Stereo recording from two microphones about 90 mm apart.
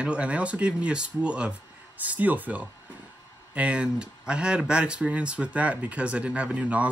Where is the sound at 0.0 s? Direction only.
15° right (ahead or behind).